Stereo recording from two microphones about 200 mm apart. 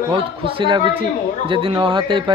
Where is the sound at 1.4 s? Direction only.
25° right (ahead or behind).